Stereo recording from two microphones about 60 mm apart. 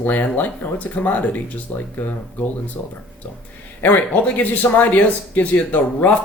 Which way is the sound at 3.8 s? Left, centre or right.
Left.